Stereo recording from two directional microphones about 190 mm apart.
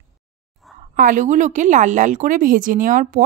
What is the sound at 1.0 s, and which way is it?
A woman's voice, 45° right (ahead or behind).